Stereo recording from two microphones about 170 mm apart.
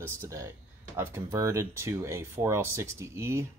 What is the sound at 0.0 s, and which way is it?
Speech, 15° right (ahead or behind).